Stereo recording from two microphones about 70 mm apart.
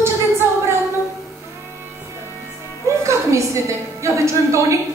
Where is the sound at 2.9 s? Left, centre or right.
Right.